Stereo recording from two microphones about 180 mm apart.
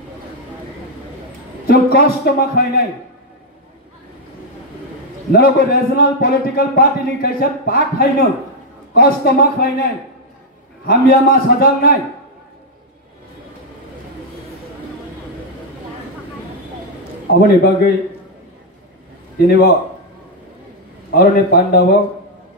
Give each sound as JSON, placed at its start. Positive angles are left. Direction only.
{"t": 1.7, "sound": "a man's voice", "side_deg": 55}
{"t": 5.3, "sound": "a man's voice", "side_deg": 55}
{"t": 10.9, "sound": "a man's voice", "side_deg": 55}
{"t": 17.4, "sound": "a man's voice", "side_deg": 55}
{"t": 19.4, "sound": "a man's voice", "side_deg": 55}
{"t": 21.1, "sound": "a man's voice", "side_deg": 55}